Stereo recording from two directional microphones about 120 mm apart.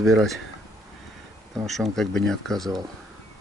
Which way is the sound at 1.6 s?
Centre (ahead or behind).